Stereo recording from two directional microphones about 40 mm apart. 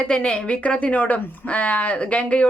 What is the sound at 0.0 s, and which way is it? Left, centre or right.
Speech, left.